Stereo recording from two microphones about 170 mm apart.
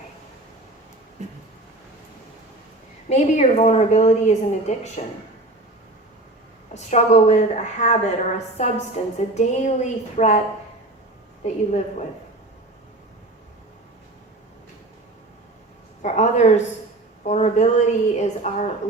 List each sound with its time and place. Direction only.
1.2 s a sound: 40° right (ahead or behind)
3.1 s a woman's voice: 40° left (ahead or behind)
6.7 s a woman's voice: 40° left (ahead or behind)
11.4 s a woman's voice: 40° left (ahead or behind)
16.0 s a woman's voice: 45° left (ahead or behind)